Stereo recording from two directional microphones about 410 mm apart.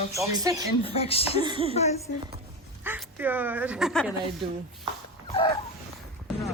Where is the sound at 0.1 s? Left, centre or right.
Centre.